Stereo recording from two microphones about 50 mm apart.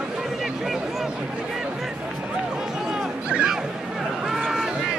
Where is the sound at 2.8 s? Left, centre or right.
Centre.